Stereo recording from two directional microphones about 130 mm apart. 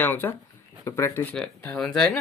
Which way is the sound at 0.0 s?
15° left (ahead or behind).